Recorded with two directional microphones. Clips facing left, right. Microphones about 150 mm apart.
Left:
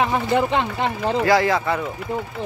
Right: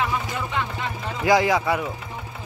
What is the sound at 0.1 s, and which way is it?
Speech, 65° left (ahead or behind).